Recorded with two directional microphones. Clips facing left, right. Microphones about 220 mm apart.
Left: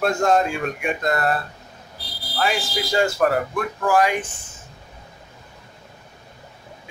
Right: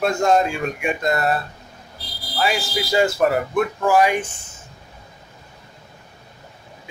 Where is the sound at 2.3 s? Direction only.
5° right (ahead or behind).